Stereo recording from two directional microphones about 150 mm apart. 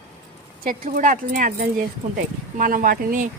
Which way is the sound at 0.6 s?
65° right (ahead or behind).